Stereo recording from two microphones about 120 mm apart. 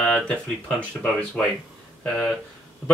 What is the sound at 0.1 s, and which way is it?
Speech, 5° left (ahead or behind).